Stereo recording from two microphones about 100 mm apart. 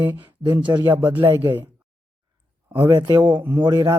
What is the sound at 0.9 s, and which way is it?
Speech, 20° right (ahead or behind).